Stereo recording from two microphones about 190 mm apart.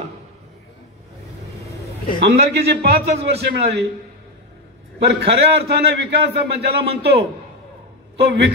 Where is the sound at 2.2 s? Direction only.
60° right (ahead or behind).